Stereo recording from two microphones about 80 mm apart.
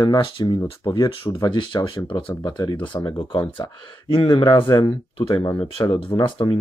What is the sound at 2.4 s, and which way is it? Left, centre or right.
Speech, left.